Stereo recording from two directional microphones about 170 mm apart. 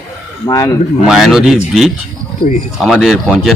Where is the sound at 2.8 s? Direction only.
Centre (ahead or behind).